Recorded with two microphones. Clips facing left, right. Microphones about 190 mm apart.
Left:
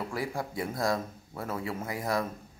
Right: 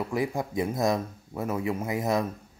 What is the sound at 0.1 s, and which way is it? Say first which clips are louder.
Speech: right 5 dB; 20° right (ahead or behind).